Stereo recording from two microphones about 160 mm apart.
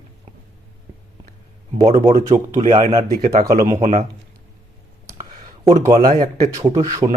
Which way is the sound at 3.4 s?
20° right (ahead or behind).